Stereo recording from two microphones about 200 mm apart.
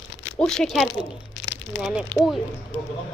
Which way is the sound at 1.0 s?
60° left (ahead or behind).